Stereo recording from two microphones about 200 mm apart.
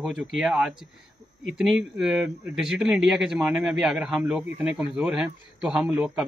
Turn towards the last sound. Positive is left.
turn(degrees=-5)  # may be behind; listen again after turning